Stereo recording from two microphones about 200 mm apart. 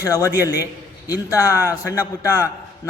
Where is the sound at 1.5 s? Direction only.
10° right (ahead or behind).